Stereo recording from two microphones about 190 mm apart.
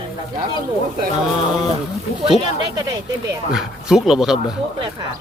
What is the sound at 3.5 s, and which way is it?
A man's voice, 5° right (ahead or behind).